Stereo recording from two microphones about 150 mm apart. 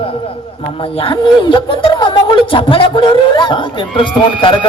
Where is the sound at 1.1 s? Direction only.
30° left (ahead or behind).